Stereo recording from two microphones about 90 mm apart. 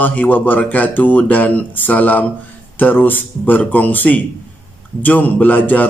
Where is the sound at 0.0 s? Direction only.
20° left (ahead or behind).